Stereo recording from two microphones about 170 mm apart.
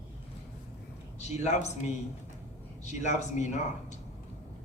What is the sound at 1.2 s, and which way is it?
Speech, 40° left (ahead or behind).